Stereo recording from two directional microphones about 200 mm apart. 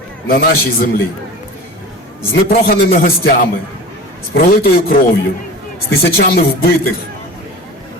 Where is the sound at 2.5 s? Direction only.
50° left (ahead or behind).